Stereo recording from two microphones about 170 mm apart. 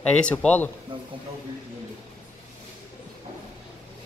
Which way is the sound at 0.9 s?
30° right (ahead or behind).